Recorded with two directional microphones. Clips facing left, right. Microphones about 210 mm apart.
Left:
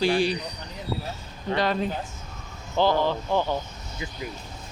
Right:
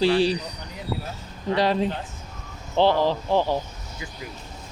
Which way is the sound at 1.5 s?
30° right (ahead or behind).